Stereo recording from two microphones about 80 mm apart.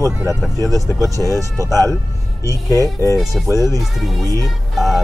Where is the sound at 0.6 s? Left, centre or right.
Right.